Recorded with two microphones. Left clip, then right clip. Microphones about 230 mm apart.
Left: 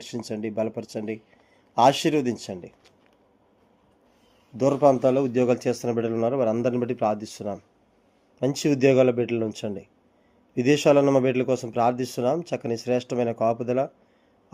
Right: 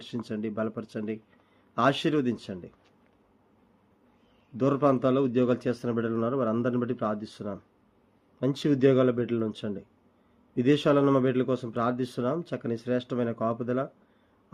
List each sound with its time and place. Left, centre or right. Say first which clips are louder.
0.0 s speech: left 3 dB; centre
4.5 s a man's voice: left 5 dB; centre